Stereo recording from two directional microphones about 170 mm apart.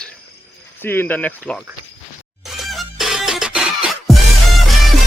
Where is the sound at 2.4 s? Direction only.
Centre (ahead or behind).